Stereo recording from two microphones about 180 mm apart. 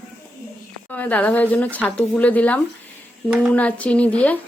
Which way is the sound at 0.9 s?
10° left (ahead or behind).